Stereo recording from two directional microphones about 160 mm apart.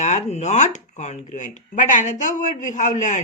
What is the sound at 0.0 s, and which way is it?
Speech, 45° left (ahead or behind).